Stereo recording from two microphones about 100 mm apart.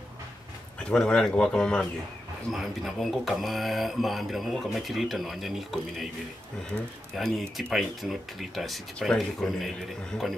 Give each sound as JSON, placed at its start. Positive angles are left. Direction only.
{"t": 0.8, "sound": "speech", "side_deg": 10}
{"t": 2.5, "sound": "speech", "side_deg": 0}
{"t": 7.2, "sound": "speech", "side_deg": 0}